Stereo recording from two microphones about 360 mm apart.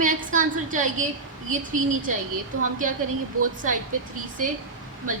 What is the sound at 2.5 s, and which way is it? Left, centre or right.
Speech, right.